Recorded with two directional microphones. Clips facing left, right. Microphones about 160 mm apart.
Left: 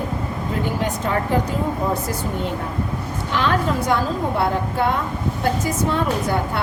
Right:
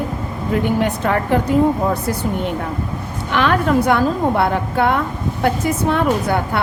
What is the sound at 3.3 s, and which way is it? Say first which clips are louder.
A woman's voice: right 5 dB; 65° right (ahead or behind).